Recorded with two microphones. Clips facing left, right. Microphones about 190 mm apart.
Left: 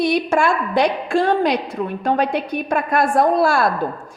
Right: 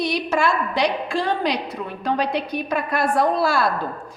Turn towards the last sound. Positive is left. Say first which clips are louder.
# left 4 dB
turn(degrees=50)  # may be behind; listen again after turning